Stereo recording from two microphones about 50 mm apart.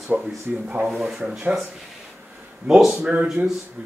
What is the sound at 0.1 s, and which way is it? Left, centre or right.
Speech, centre.